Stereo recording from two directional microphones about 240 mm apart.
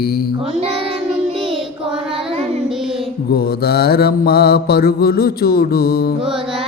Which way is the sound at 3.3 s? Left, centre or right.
Left.